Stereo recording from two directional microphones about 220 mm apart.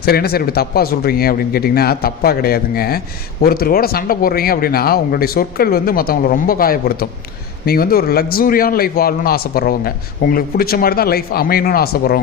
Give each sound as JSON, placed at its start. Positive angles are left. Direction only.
{"t": 0.0, "sound": "a man's voice", "side_deg": 45}